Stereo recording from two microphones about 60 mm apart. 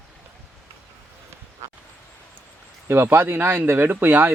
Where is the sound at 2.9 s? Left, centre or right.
Right.